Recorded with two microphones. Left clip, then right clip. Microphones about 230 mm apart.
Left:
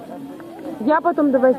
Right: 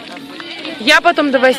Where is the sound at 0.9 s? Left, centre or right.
Right.